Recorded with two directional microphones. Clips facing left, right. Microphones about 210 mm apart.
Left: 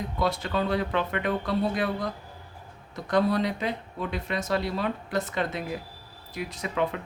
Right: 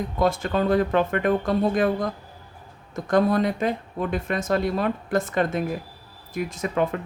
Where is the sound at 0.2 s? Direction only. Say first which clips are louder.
Right 5 dB; 50° right (ahead or behind).